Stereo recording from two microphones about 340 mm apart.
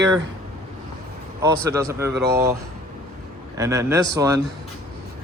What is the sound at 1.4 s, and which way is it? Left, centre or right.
Speech, centre.